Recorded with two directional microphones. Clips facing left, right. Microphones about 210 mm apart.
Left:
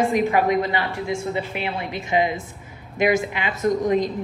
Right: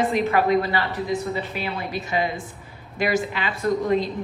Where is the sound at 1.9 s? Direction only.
20° left (ahead or behind).